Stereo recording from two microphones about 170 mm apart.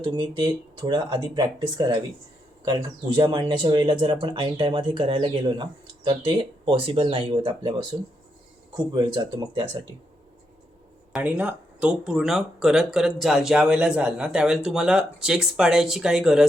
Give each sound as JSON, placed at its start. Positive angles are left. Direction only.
{"t": 0.0, "sound": "speech", "side_deg": -25}
{"t": 8.7, "sound": "speech", "side_deg": -25}
{"t": 11.1, "sound": "speech", "side_deg": -10}